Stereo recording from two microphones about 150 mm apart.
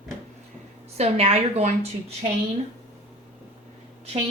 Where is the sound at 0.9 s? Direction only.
45° right (ahead or behind).